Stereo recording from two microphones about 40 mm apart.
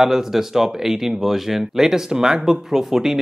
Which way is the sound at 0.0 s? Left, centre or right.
Centre.